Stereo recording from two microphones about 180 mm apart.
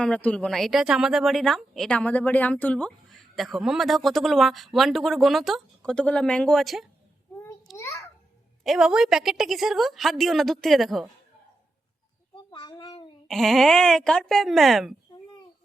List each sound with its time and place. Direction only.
0.0 s speech: 5° left (ahead or behind)
7.8 s a sound: 15° left (ahead or behind)
8.6 s speech: centre (ahead or behind)
12.5 s child singing: 25° left (ahead or behind)
13.2 s speech: centre (ahead or behind)